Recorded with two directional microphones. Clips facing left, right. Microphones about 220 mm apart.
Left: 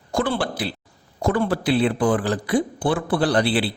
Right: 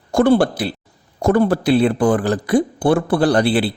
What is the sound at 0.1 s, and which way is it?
Speech, 45° right (ahead or behind).